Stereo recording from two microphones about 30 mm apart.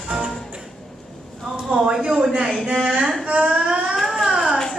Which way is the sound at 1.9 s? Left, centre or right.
Right.